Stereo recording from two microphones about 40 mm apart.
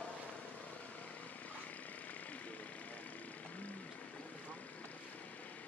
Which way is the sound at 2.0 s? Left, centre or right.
Left.